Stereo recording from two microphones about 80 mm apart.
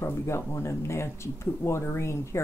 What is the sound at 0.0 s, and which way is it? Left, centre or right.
Speech, left.